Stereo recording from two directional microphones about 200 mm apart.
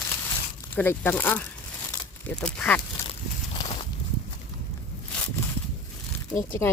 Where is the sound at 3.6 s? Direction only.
25° left (ahead or behind).